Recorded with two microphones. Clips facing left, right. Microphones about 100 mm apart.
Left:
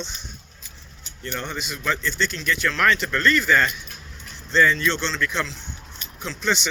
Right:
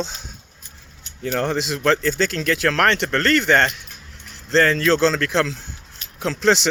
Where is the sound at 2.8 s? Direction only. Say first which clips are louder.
Right 3 dB; 65° right (ahead or behind).